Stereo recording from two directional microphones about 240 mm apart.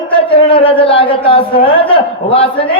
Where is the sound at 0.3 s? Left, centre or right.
Left.